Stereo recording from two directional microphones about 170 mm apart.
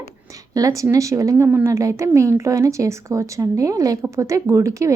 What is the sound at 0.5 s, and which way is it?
A woman's voice, 20° right (ahead or behind).